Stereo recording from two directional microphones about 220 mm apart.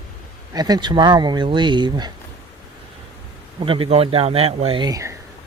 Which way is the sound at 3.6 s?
25° right (ahead or behind).